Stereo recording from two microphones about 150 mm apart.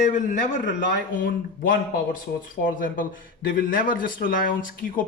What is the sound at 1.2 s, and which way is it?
Speech, 65° left (ahead or behind).